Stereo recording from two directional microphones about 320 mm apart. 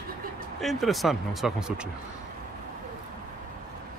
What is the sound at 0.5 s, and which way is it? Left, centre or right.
A man's voice, centre.